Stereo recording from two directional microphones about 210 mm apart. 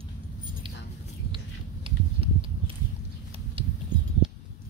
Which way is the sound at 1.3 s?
25° right (ahead or behind).